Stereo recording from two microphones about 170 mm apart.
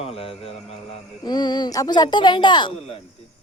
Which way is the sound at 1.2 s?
25° left (ahead or behind).